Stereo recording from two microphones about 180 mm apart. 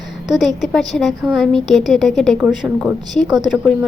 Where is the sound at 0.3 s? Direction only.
Centre (ahead or behind).